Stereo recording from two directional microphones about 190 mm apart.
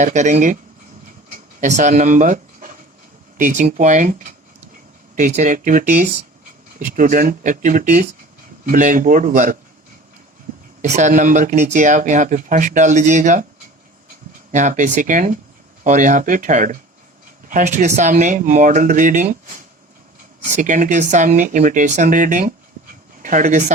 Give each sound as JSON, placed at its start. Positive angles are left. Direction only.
{"t": 0.0, "sound": "speech", "side_deg": -40}
{"t": 1.3, "sound": "a sound", "side_deg": -40}
{"t": 3.3, "sound": "speech", "side_deg": -40}
{"t": 10.8, "sound": "speech", "side_deg": -40}
{"t": 14.5, "sound": "speech", "side_deg": -40}